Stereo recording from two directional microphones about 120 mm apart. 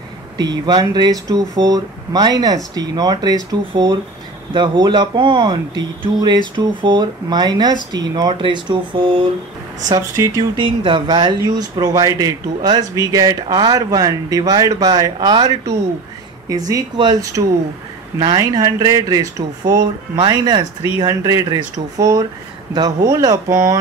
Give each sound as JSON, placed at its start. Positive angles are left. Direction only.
{"t": 0.4, "sound": "speech", "side_deg": -35}
{"t": 9.8, "sound": "speech", "side_deg": -30}
{"t": 10.5, "sound": "speech", "side_deg": -45}